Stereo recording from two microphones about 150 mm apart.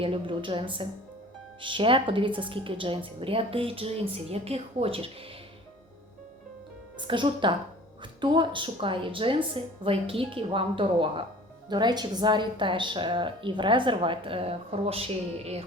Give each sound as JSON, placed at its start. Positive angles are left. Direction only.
{"t": 0.0, "sound": "a woman's voice", "side_deg": -35}
{"t": 7.1, "sound": "a woman's voice", "side_deg": -30}